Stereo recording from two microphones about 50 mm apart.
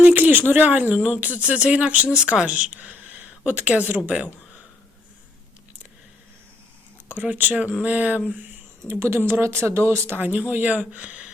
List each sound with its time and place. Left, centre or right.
0.0 s speech: right
7.1 s speech: right
8.9 s speech: right
10.2 s speech: right